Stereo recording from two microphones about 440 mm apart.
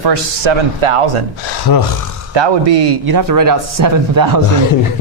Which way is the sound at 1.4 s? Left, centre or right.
Left.